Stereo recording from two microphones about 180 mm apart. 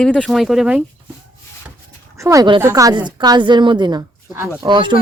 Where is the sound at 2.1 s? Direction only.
15° right (ahead or behind).